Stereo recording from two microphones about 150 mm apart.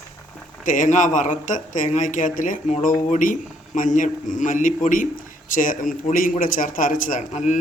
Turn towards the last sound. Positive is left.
turn(degrees=55)  # may be behind; listen again after turning